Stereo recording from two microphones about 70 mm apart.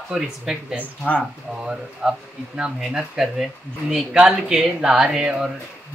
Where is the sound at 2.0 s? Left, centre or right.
Centre.